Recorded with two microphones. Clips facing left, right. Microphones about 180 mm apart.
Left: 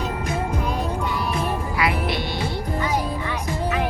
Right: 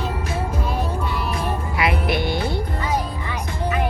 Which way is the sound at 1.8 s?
25° right (ahead or behind).